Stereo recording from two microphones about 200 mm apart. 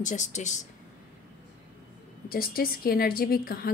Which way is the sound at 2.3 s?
50° left (ahead or behind).